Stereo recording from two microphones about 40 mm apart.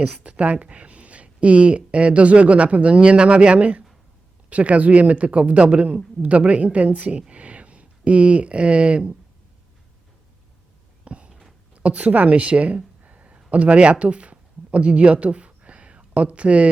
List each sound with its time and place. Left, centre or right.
0.0 s speech: right
7.2 s speech: right
11.0 s a sound: right
13.5 s speech: right